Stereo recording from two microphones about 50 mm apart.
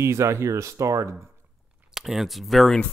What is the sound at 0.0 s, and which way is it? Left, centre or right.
Speech, right.